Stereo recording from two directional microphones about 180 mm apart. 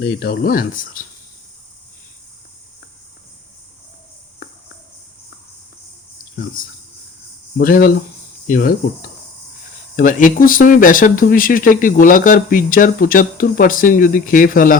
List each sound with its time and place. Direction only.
0.0 s speech: 55° left (ahead or behind)
6.6 s speech: 50° left (ahead or behind)